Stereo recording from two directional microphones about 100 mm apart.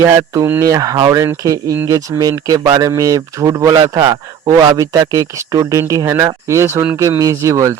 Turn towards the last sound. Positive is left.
turn(degrees=-30)  # may be behind; listen again after turning